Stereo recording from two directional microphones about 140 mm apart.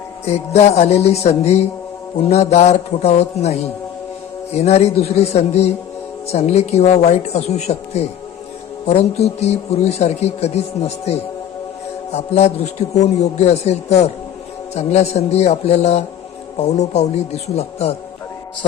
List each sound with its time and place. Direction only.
0.3 s a man's voice: 50° left (ahead or behind)